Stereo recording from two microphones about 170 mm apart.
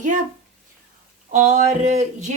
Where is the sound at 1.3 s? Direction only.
45° right (ahead or behind).